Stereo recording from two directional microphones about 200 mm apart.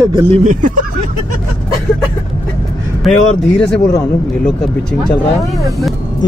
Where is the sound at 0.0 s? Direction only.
25° right (ahead or behind).